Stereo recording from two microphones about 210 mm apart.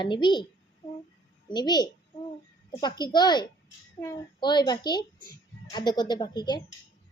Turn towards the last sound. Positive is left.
turn(degrees=20)  # may be behind; listen again after turning